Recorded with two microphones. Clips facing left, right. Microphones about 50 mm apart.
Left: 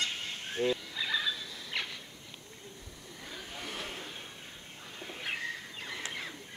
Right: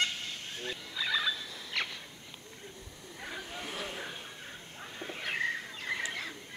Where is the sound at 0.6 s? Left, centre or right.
Left.